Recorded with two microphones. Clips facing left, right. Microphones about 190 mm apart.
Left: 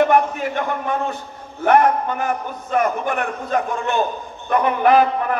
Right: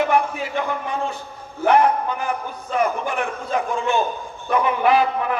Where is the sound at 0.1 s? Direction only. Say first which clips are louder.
Left 3 dB; 45° left (ahead or behind).